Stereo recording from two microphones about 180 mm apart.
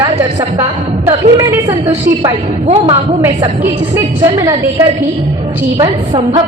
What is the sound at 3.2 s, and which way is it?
A woman's voice, 20° right (ahead or behind).